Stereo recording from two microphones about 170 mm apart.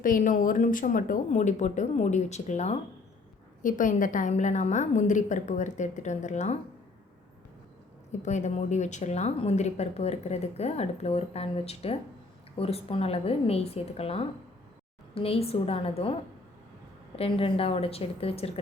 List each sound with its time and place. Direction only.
0.0 s a woman's voice: 50° left (ahead or behind)
8.2 s speech: 45° left (ahead or behind)
17.2 s speech: 35° left (ahead or behind)